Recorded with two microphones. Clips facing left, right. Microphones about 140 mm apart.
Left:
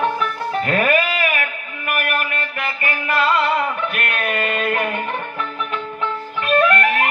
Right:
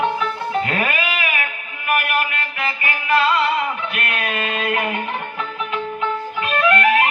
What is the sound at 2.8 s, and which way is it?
Music, 45° left (ahead or behind).